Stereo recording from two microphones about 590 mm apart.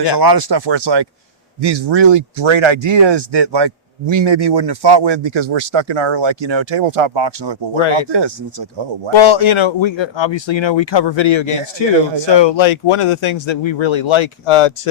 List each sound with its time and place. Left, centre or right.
0.0 s speech: right
9.1 s speech: left